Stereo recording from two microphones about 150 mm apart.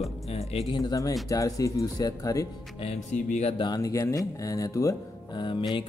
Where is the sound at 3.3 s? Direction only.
50° left (ahead or behind).